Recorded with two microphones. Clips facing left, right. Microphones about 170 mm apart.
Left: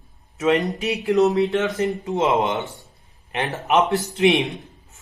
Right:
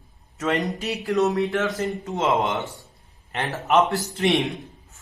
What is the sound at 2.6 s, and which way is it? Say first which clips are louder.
Speech: even; centre (ahead or behind).